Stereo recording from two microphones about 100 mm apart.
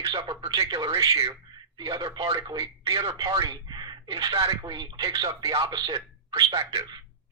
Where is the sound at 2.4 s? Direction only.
45° right (ahead or behind).